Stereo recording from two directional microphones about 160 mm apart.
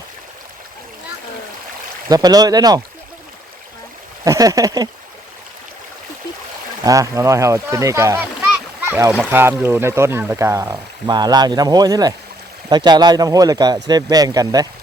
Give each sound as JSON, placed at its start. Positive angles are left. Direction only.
{"t": 2.0, "sound": "speech", "side_deg": -25}
{"t": 4.2, "sound": "speech", "side_deg": -20}
{"t": 6.8, "sound": "speech", "side_deg": -20}